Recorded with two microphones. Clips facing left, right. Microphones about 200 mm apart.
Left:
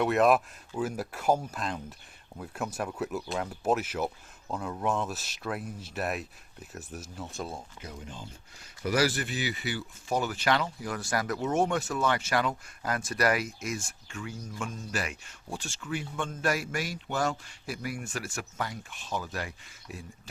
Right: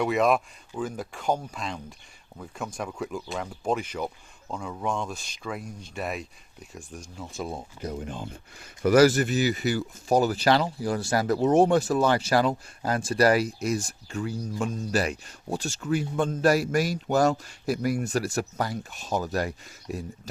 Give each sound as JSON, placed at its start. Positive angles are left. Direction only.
{"t": 0.0, "sound": "speech", "side_deg": 0}
{"t": 7.8, "sound": "speech", "side_deg": -40}
{"t": 8.0, "sound": "speech", "side_deg": -60}